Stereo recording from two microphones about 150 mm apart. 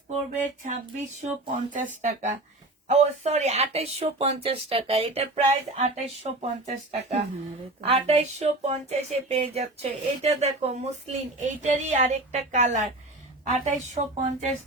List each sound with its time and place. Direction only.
0.4 s speech: 55° right (ahead or behind)